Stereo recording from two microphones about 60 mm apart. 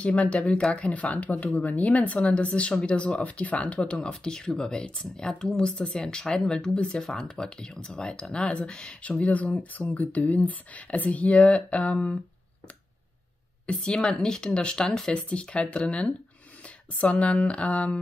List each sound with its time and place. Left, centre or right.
0.0 s speech: left
13.7 s speech: centre